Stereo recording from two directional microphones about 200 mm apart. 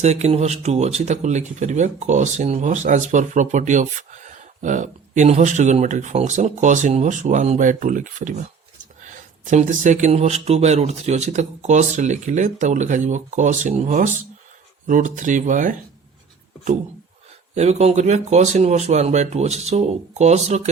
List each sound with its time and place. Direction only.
0.0 s speech: 35° right (ahead or behind)
9.5 s speech: 40° right (ahead or behind)
17.5 s speech: 35° right (ahead or behind)